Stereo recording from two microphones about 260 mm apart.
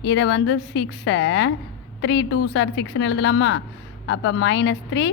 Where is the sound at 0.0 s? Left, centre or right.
Left.